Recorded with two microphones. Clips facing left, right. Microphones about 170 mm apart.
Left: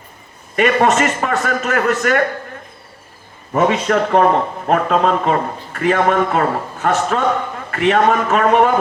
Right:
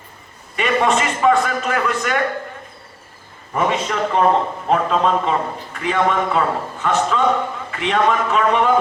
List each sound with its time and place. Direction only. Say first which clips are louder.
0.5 s a man's voice: left 4 dB; 50° left (ahead or behind)
3.5 s a man's voice: left 5 dB; 45° left (ahead or behind)